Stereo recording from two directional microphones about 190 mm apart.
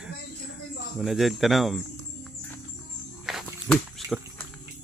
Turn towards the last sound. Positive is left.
turn(degrees=0)  # may be behind; listen again after turning